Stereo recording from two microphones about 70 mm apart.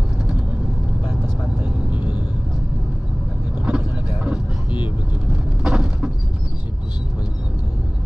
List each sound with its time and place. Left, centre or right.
1.6 s vehicle: right
3.6 s vehicle: centre
5.6 s a sound: centre